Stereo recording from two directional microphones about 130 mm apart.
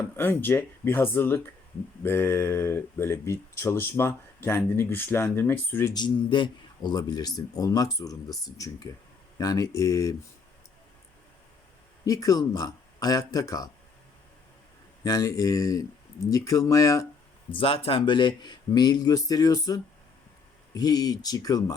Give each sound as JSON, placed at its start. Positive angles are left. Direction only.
{"t": 0.2, "sound": "speech", "side_deg": 15}
{"t": 5.9, "sound": "speech", "side_deg": 35}
{"t": 12.0, "sound": "speech", "side_deg": 25}
{"t": 15.0, "sound": "speech", "side_deg": 25}
{"t": 17.5, "sound": "speech", "side_deg": 45}